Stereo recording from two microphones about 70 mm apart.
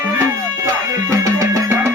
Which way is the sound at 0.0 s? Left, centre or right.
Right.